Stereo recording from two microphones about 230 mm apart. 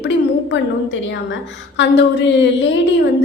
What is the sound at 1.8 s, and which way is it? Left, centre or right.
Speech, left.